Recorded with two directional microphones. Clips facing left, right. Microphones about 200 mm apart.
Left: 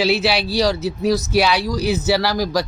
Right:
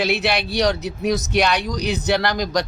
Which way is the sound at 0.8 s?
20° right (ahead or behind).